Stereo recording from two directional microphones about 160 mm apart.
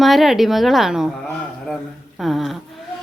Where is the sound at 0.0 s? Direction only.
Centre (ahead or behind).